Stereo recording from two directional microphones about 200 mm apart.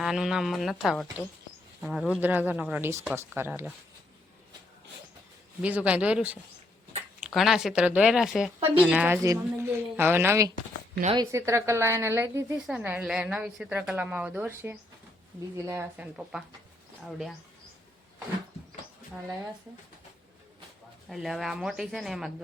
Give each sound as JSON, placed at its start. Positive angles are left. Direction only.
{"t": 0.0, "sound": "a woman's voice", "side_deg": 0}
{"t": 5.6, "sound": "a woman's voice", "side_deg": -5}
{"t": 11.0, "sound": "speech", "side_deg": -25}
{"t": 11.3, "sound": "a woman's voice", "side_deg": -15}
{"t": 21.1, "sound": "speech", "side_deg": 0}